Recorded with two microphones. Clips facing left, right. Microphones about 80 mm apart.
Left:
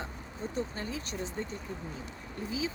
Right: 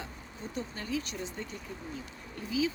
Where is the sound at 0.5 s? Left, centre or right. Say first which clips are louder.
Right 1 dB; left.